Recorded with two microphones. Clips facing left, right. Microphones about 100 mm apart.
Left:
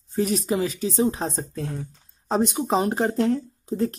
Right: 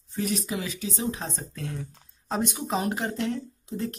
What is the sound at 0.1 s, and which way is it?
A woman's voice, 35° left (ahead or behind).